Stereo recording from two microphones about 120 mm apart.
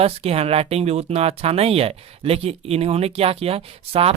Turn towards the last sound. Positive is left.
turn(degrees=-55)  # may be behind; listen again after turning